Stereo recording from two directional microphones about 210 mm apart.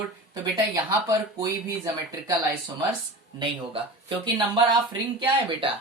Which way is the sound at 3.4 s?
25° right (ahead or behind).